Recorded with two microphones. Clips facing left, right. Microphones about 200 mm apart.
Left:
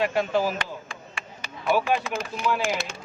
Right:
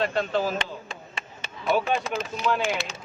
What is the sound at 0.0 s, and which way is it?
Speech, 10° left (ahead or behind).